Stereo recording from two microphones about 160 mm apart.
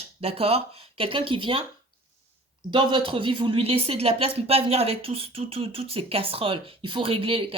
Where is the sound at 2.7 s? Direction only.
30° right (ahead or behind).